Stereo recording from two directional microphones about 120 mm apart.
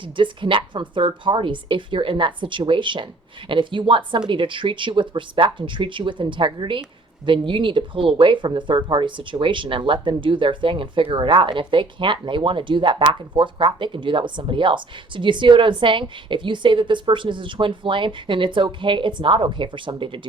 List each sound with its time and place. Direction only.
0.0 s speech: 45° right (ahead or behind)